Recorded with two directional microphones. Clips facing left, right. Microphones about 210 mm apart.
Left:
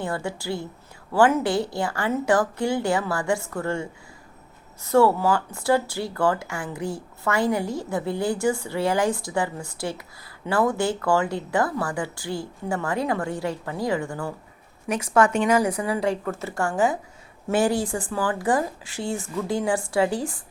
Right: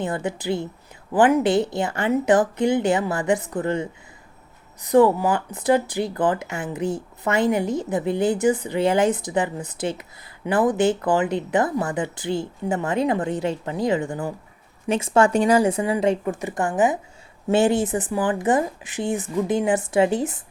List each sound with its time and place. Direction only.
0.0 s speech: 20° right (ahead or behind)